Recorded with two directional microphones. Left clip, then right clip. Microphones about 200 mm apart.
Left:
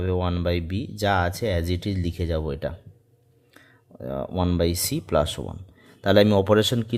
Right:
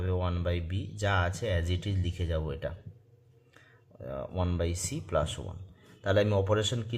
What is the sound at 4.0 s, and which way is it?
Speech, 45° left (ahead or behind).